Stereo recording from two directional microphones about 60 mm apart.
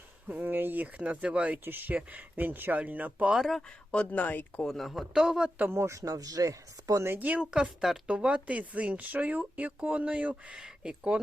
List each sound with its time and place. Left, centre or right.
0.3 s speech: right
1.6 s speech: right
3.3 s a man's voice: centre
3.9 s speech: left
4.6 s a man's voice: centre
5.6 s speech: right
6.0 s speech: right
7.2 s speech: right
7.5 s speech: centre